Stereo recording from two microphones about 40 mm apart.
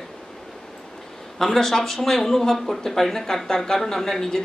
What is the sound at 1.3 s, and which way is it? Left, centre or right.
Speech, centre.